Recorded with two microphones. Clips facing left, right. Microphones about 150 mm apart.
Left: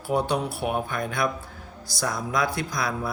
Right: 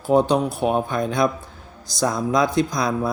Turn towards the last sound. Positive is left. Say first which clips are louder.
# right 6 dB
turn(degrees=-20)  # may be behind; listen again after turning